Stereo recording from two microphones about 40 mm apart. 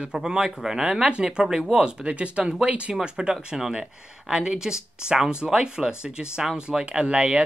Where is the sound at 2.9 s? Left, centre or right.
Centre.